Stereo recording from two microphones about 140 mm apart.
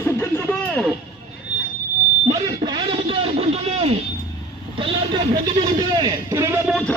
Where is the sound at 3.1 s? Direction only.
45° right (ahead or behind).